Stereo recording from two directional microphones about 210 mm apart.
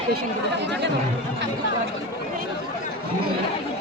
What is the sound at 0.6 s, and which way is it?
Speech, 55° right (ahead or behind).